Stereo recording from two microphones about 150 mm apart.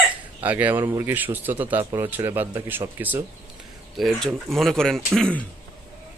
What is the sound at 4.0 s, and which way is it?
Speech, centre (ahead or behind).